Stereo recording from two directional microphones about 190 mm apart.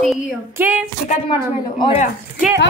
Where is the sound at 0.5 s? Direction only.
10° right (ahead or behind).